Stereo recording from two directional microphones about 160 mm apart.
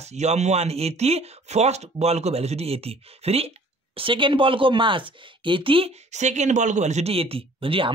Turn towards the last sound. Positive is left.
turn(degrees=-35)  # may be behind; listen again after turning